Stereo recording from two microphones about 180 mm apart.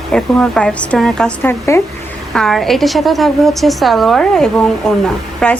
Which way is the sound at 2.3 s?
Centre (ahead or behind).